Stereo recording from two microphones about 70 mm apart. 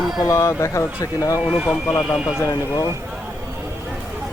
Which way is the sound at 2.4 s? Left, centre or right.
Left.